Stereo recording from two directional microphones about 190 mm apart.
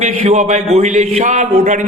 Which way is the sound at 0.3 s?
40° right (ahead or behind).